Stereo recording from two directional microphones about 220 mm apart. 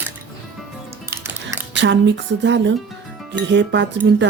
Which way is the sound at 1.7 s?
55° right (ahead or behind).